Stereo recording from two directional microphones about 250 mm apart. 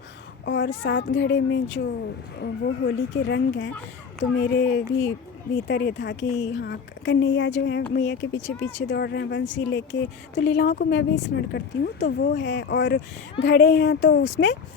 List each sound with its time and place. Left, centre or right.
0.4 s a woman's voice: left
4.2 s a sound: left
5.6 s speech: left